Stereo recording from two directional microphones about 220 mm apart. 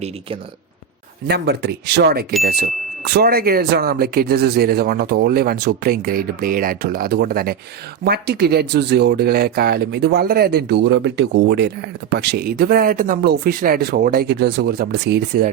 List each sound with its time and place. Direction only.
1.3 s speech: 45° right (ahead or behind)